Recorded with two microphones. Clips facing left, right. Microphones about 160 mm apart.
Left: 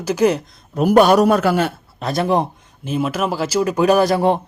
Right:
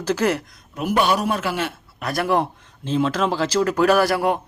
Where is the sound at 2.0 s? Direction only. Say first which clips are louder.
Left 3 dB; 25° left (ahead or behind).